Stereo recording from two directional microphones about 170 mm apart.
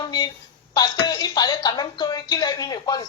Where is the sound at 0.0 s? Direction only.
25° left (ahead or behind).